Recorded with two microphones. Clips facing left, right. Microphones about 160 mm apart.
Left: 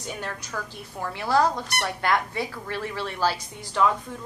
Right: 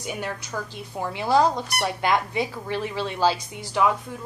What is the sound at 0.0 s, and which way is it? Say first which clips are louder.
Speech: right 3 dB; 10° right (ahead or behind).